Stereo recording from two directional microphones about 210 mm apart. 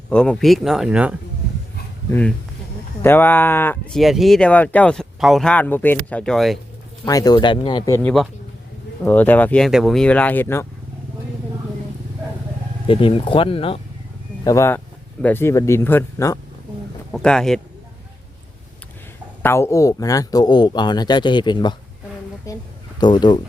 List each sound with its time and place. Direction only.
0.1 s speech: 5° left (ahead or behind)
2.0 s speech: 10° left (ahead or behind)
7.0 s speech: 15° left (ahead or behind)
12.9 s speech: 25° left (ahead or behind)
14.4 s speech: 15° left (ahead or behind)
17.1 s speech: 5° left (ahead or behind)
19.4 s speech: 10° left (ahead or behind)
23.0 s speech: 20° left (ahead or behind)